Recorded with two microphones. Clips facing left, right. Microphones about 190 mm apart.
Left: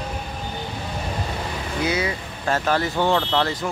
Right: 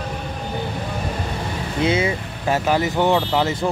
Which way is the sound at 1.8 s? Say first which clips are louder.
Right 5 dB; 25° right (ahead or behind).